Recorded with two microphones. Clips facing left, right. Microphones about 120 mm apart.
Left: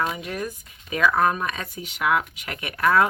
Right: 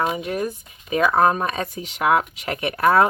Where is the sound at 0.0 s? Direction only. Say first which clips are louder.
Right 4 dB; 25° right (ahead or behind).